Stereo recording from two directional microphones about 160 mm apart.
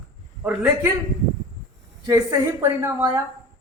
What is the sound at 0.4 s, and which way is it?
Speech, 10° right (ahead or behind).